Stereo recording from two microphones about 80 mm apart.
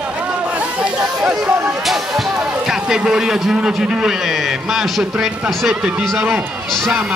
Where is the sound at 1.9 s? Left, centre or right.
Centre.